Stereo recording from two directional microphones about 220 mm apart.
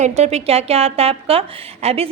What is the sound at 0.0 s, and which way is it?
A woman's voice, 30° right (ahead or behind).